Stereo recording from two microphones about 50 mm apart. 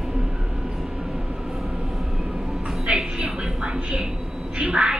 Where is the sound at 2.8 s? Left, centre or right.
Centre.